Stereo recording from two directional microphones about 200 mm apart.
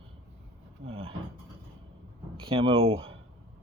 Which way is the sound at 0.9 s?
30° right (ahead or behind).